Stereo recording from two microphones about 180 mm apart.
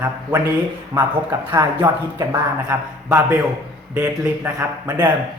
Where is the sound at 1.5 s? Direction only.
15° right (ahead or behind).